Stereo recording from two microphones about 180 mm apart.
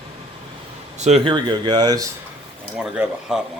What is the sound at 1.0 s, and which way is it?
Speech, 35° right (ahead or behind).